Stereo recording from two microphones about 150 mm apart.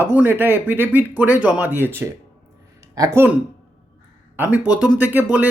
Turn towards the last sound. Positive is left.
turn(degrees=-10)  # may be behind; listen again after turning